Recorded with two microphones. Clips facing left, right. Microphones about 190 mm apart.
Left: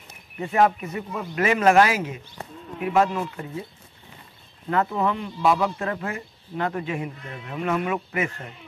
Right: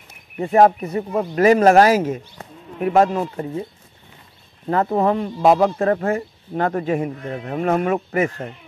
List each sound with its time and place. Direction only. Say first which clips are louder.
0.4 s speech: right 6 dB; 40° right (ahead or behind)
4.6 s speech: right 5 dB; 40° right (ahead or behind)